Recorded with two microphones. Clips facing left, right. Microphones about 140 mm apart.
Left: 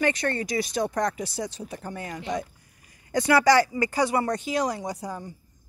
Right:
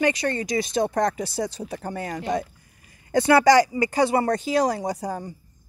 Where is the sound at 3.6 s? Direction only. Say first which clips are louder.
Right 3 dB; 15° right (ahead or behind).